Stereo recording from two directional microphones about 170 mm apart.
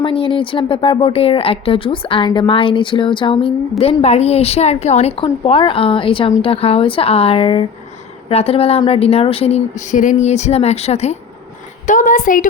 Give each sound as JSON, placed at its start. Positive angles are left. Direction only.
{"t": 0.0, "sound": "speech", "side_deg": 30}
{"t": 11.9, "sound": "a woman's voice", "side_deg": 50}